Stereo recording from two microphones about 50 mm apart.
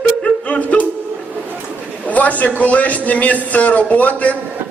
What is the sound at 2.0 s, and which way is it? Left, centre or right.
A man's voice, left.